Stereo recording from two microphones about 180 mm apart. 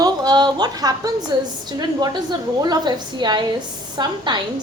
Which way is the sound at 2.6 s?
25° right (ahead or behind).